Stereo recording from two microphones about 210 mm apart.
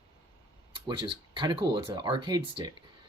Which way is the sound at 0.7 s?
25° right (ahead or behind).